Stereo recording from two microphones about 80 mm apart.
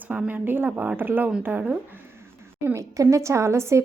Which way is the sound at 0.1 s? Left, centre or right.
Centre.